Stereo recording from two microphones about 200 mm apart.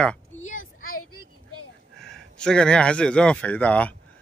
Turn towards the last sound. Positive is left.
turn(degrees=5)  # may be behind; listen again after turning